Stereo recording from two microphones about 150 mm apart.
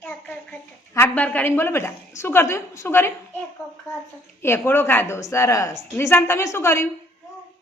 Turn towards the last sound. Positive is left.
turn(degrees=15)  # may be behind; listen again after turning